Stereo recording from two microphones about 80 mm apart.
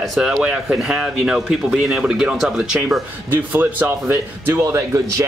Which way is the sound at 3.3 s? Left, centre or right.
Right.